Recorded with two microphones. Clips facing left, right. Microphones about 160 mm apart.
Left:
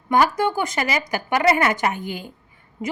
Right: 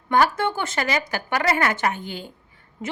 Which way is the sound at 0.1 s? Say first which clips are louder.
Left 1 dB; 15° left (ahead or behind).